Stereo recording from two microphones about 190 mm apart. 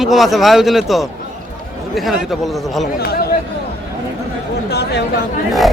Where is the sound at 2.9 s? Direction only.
55° left (ahead or behind).